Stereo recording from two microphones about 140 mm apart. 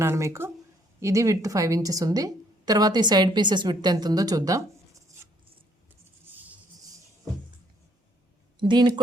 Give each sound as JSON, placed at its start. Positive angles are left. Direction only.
{"t": 0.0, "sound": "a woman's voice", "side_deg": -20}
{"t": 8.5, "sound": "speech", "side_deg": -35}